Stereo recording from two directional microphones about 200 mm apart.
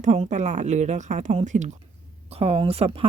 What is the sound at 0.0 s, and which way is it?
A woman's voice, 35° right (ahead or behind).